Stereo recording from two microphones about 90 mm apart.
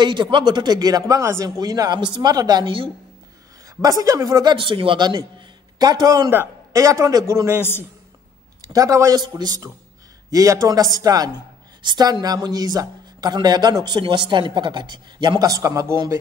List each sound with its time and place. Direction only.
0.0 s a woman's voice: 60° right (ahead or behind)
4.6 s speech: 80° right
5.8 s a woman's voice: 50° right (ahead or behind)
8.7 s a man's voice: 40° right (ahead or behind)
10.3 s a woman's voice: 40° right (ahead or behind); by 15.3 s 55° right (ahead or behind)
15.3 s a man's voice: 40° right (ahead or behind)